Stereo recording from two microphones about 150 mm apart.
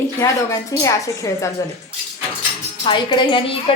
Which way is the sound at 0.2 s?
20° left (ahead or behind).